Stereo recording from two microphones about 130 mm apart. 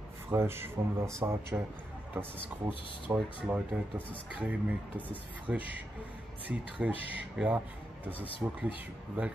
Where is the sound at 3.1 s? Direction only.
5° right (ahead or behind).